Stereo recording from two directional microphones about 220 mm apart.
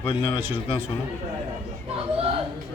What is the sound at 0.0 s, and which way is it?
Speech, 20° left (ahead or behind).